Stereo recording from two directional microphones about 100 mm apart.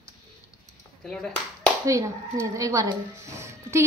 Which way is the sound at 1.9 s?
30° right (ahead or behind).